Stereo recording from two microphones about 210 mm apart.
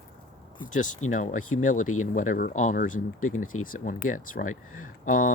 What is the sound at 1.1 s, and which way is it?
Speech, 35° left (ahead or behind).